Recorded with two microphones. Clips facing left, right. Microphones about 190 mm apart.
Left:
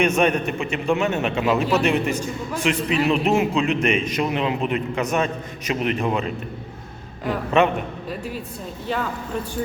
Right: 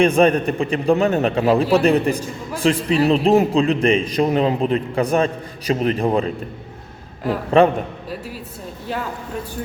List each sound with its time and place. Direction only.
0.0 s a man's voice: 35° right (ahead or behind)
7.6 s a man's voice: 30° right (ahead or behind)